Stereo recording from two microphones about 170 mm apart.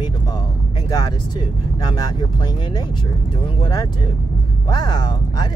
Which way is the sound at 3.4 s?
25° left (ahead or behind).